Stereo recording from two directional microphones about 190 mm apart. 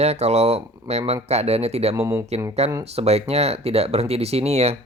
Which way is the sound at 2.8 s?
35° right (ahead or behind).